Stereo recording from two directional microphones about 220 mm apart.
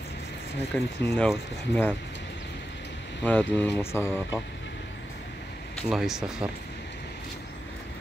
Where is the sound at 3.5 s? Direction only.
10° left (ahead or behind).